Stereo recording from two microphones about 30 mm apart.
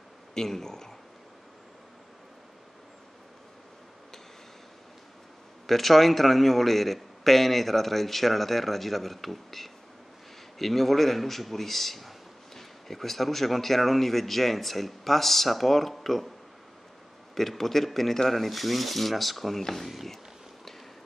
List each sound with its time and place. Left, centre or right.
0.3 s speech: centre
5.7 s a man's voice: centre
17.4 s a man's voice: centre